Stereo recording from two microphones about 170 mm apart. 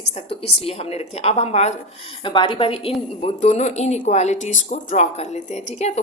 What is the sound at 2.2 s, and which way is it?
A woman's voice, 30° left (ahead or behind).